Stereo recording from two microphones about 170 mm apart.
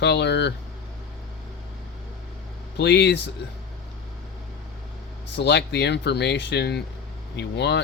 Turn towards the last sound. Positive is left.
turn(degrees=80)